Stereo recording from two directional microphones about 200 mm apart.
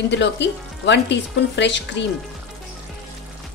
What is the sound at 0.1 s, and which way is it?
Speech, 60° left (ahead or behind).